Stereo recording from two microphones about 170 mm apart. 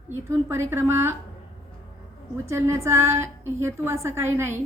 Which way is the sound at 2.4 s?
15° right (ahead or behind).